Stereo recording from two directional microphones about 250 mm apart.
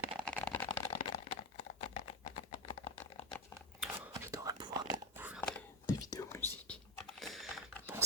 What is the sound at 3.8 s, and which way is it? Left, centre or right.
Whispering, centre.